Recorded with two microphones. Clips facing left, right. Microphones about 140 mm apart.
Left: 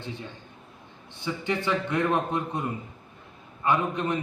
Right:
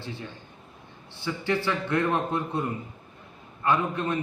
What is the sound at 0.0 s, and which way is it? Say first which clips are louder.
A man's voice: even; 20° left (ahead or behind).